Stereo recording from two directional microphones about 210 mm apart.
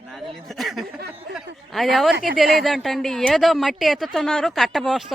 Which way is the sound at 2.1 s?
45° right (ahead or behind).